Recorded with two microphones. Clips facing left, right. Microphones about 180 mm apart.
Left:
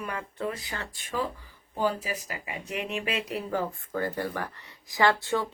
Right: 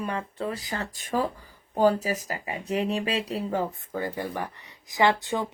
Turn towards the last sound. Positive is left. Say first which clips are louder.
# right 1 dB
turn(degrees=-15)  # may be behind; listen again after turning